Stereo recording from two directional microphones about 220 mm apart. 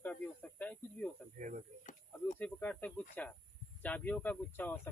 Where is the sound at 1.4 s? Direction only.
35° right (ahead or behind).